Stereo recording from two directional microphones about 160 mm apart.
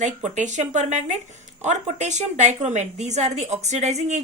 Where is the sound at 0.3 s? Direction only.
50° right (ahead or behind).